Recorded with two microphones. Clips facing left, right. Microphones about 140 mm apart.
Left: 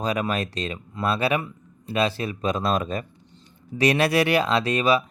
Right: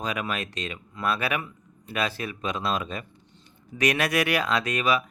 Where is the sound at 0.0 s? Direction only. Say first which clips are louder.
Left 5 dB; 35° left (ahead or behind).